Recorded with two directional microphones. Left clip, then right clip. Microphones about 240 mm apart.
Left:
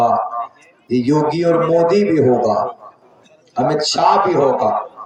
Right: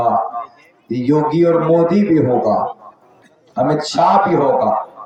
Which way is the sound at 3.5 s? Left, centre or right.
Left.